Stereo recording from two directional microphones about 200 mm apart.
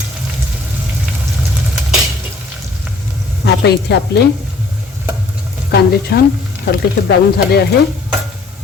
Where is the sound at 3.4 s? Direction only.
55° left (ahead or behind).